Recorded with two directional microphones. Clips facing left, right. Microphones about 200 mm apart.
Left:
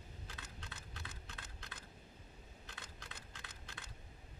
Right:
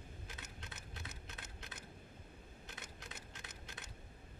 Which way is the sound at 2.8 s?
20° right (ahead or behind).